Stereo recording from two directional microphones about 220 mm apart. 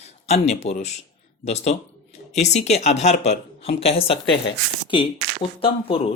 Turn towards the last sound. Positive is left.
turn(degrees=25)  # may be behind; listen again after turning